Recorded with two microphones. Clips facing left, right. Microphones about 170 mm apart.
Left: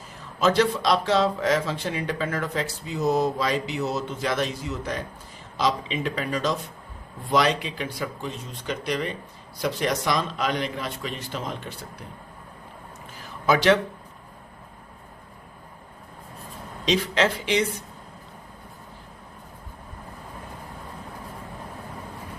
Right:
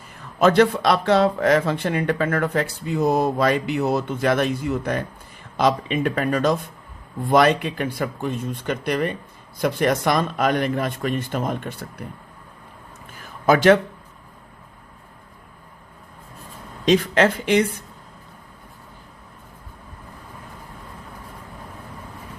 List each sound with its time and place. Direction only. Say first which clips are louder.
0.3 s a man's voice: right 5 dB; 55° right (ahead or behind)
13.1 s a sound: right 4 dB; 50° right (ahead or behind)
16.8 s a man's voice: right 5 dB; 50° right (ahead or behind)